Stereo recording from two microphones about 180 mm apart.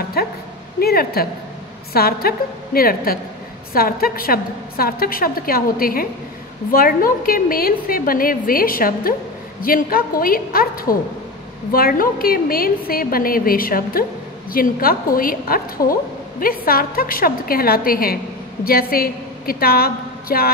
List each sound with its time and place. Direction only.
0.2 s a woman's voice: 60° left (ahead or behind)